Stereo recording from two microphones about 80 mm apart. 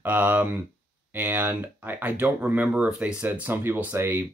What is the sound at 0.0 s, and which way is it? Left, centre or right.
Speech, right.